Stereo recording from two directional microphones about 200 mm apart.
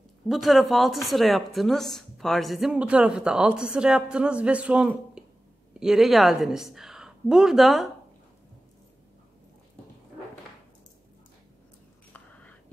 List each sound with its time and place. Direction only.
0.3 s a woman's voice: centre (ahead or behind)
12.1 s whispering: 10° left (ahead or behind)